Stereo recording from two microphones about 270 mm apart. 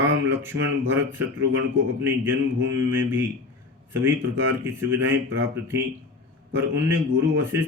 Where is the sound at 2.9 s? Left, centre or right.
Centre.